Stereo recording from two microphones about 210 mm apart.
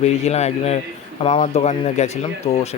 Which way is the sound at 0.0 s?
30° left (ahead or behind).